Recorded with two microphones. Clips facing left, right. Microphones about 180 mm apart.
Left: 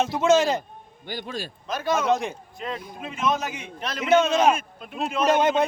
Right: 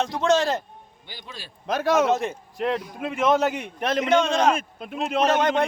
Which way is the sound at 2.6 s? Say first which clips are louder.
Right 9 dB; 65° right (ahead or behind).